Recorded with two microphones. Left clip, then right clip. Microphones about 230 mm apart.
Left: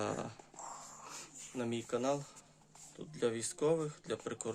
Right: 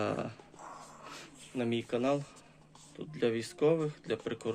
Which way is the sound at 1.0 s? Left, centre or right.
Centre.